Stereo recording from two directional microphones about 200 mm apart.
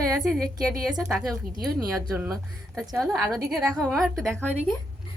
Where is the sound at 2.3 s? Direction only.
Centre (ahead or behind).